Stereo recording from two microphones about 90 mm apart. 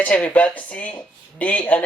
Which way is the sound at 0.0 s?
15° left (ahead or behind).